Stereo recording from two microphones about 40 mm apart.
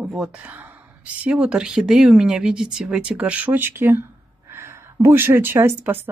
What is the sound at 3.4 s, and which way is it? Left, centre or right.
Speech, right.